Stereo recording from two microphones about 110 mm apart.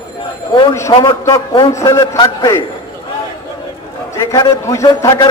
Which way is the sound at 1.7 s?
30° left (ahead or behind).